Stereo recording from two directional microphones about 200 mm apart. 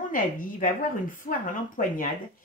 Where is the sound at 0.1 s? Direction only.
40° left (ahead or behind).